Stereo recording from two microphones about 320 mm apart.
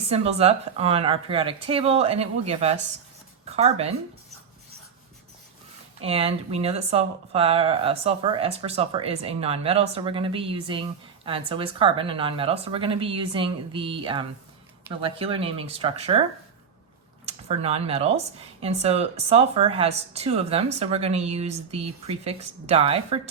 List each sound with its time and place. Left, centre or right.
0.1 s speech: centre
6.0 s speech: centre
17.2 s speech: centre